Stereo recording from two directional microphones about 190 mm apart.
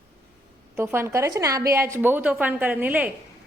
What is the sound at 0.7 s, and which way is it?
A woman's voice, 15° right (ahead or behind).